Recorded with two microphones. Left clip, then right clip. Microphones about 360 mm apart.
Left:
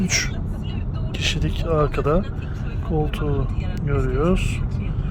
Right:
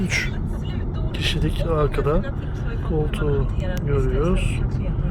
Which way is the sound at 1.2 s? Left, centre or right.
Centre.